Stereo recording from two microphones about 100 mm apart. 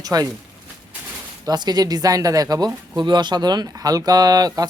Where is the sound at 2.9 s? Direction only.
50° right (ahead or behind).